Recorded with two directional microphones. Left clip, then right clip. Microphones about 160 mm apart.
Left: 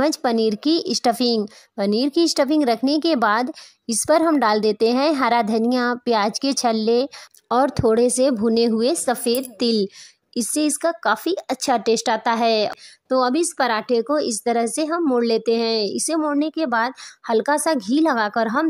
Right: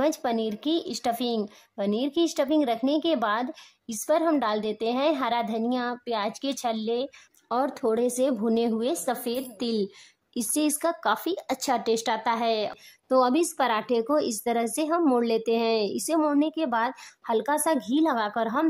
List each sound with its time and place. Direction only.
0.0 s a woman's voice: 35° left (ahead or behind)
10.3 s a woman's voice: 20° left (ahead or behind)